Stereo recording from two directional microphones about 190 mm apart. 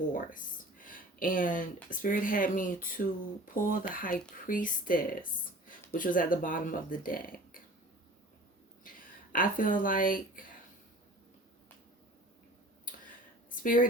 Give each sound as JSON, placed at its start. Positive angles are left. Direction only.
{"t": 0.1, "sound": "speech", "side_deg": 45}
{"t": 9.3, "sound": "speech", "side_deg": 45}
{"t": 12.8, "sound": "a sound", "side_deg": 45}